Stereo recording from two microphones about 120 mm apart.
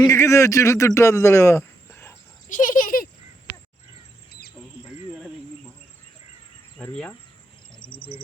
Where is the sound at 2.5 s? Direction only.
90° left.